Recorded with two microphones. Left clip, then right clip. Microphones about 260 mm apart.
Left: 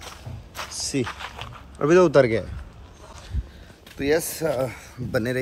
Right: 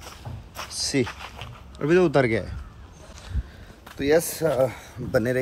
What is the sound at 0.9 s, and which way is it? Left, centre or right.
Speech, centre.